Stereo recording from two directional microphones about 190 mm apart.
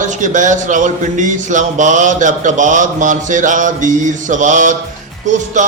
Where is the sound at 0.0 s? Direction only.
40° right (ahead or behind).